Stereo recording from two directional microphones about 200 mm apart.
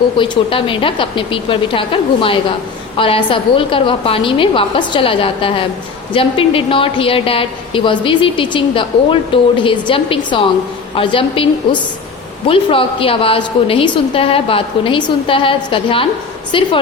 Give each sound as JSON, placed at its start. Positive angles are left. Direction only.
{"t": 0.2, "sound": "a woman's voice", "side_deg": 25}